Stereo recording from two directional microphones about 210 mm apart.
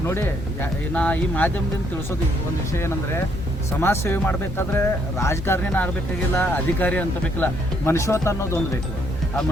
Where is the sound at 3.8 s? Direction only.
10° left (ahead or behind).